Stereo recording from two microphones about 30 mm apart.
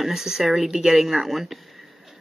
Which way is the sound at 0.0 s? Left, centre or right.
Centre.